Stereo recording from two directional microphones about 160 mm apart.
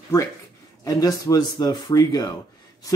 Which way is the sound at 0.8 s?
20° left (ahead or behind).